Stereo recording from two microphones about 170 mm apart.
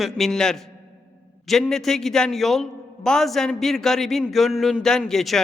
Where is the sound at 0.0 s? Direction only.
Centre (ahead or behind).